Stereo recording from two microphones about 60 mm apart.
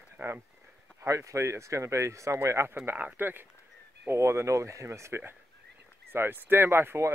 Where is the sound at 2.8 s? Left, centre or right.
Right.